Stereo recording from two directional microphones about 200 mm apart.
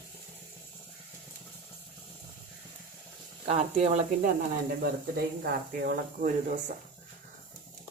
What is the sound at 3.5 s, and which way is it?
Speech, 35° right (ahead or behind).